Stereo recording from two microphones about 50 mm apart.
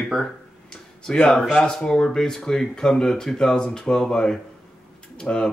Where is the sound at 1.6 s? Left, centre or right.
Centre.